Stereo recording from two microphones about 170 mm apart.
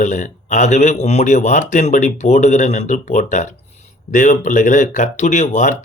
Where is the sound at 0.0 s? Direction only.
45° left (ahead or behind).